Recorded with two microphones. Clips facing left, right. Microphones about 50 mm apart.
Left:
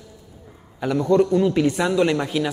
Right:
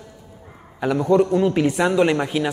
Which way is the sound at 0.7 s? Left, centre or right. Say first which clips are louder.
Right 1 dB; centre.